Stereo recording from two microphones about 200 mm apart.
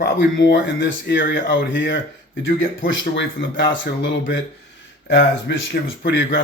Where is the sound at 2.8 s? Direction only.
70° left (ahead or behind).